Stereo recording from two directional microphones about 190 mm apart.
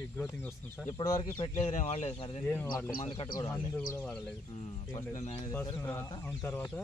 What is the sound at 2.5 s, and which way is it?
Speech, 10° left (ahead or behind).